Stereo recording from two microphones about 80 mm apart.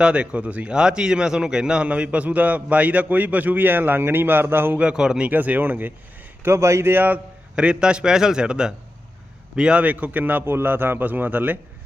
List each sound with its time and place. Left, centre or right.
0.0 s a man's voice: centre
4.8 s a man's voice: centre
5.3 s a man's voice: right
6.4 s speech: right
7.5 s a man's voice: centre